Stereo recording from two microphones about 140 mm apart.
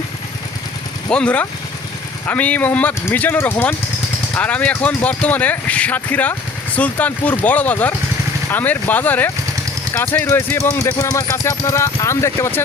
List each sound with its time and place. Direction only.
1.1 s speech: 10° left (ahead or behind)